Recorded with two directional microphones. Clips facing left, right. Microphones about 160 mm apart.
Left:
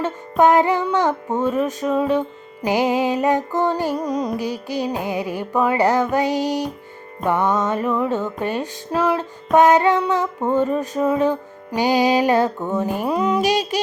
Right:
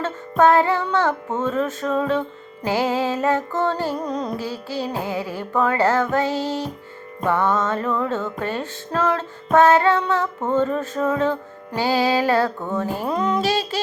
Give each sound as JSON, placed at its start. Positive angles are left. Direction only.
{"t": 0.0, "sound": "music", "side_deg": 15}